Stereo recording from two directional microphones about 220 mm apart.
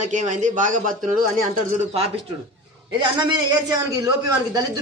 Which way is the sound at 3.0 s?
20° right (ahead or behind).